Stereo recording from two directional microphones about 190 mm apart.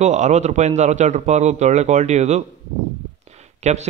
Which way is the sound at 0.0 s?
40° right (ahead or behind).